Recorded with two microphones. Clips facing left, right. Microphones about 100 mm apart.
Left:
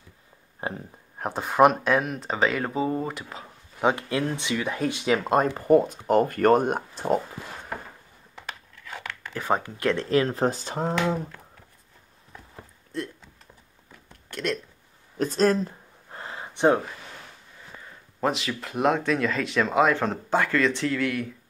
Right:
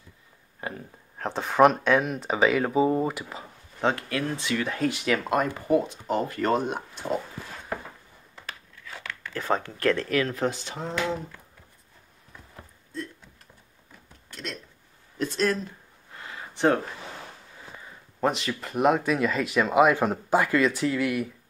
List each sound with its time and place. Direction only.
0.6 s a sound: 25° left (ahead or behind)
1.2 s speech: 5° left (ahead or behind)
3.8 s speech: 20° left (ahead or behind)
5.4 s speech: 45° left (ahead or behind)
9.3 s speech: 15° left (ahead or behind); by 11.1 s 45° left (ahead or behind)
14.3 s speech: 75° left (ahead or behind)
15.1 s a sound: 40° left (ahead or behind)
16.5 s speech: 20° left (ahead or behind)
18.2 s speech: centre (ahead or behind)